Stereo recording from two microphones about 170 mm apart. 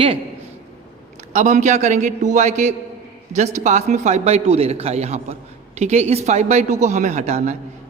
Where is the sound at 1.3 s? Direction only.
45° right (ahead or behind).